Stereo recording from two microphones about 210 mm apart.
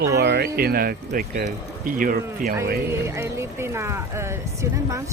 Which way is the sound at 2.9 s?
10° right (ahead or behind).